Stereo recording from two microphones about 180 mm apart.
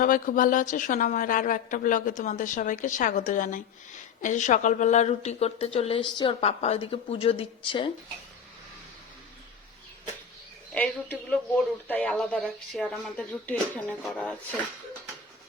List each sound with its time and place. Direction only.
0.0 s a woman's voice: 50° left (ahead or behind); by 7.9 s 30° left (ahead or behind)
10.8 s speech: 10° left (ahead or behind)